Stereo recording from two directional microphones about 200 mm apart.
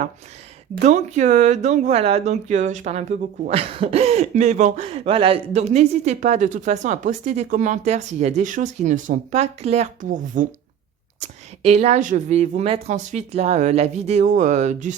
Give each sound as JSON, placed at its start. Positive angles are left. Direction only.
{"t": 0.9, "sound": "speech", "side_deg": -35}